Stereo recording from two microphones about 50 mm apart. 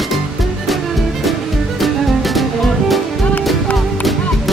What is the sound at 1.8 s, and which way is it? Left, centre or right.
Music, centre.